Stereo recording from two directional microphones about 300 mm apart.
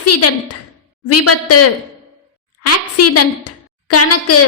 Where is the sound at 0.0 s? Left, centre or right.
Left.